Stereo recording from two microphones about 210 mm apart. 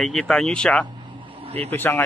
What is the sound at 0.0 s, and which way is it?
Speech, centre (ahead or behind).